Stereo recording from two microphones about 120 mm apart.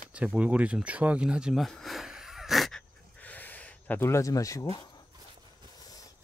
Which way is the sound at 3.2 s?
15° left (ahead or behind).